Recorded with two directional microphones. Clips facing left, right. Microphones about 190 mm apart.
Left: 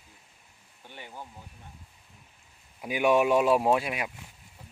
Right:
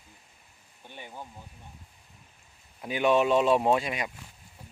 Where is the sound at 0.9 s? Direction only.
15° right (ahead or behind).